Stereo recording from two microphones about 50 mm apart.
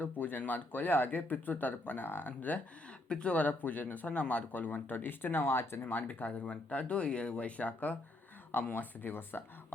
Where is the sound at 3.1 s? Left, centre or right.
Left.